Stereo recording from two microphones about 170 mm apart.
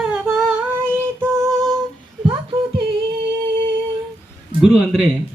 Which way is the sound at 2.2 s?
30° right (ahead or behind).